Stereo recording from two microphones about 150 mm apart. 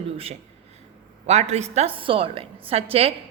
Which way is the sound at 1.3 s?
45° right (ahead or behind).